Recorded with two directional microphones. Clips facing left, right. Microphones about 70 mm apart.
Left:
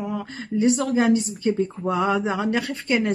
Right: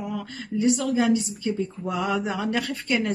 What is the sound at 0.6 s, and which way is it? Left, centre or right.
Speech, left.